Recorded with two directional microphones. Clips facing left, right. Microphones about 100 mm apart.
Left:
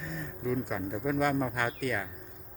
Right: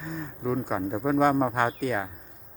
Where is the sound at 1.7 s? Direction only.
25° right (ahead or behind).